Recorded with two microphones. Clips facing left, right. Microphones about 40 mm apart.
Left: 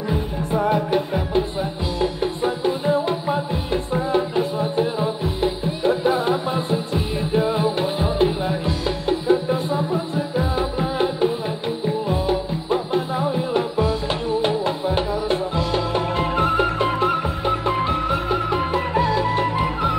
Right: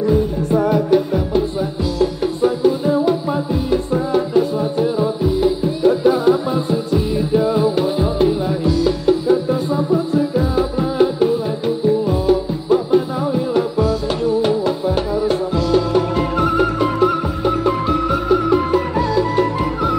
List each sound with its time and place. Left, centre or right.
0.0 s music: centre